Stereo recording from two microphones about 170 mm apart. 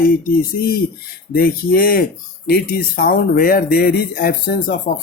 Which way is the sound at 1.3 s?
60° left (ahead or behind).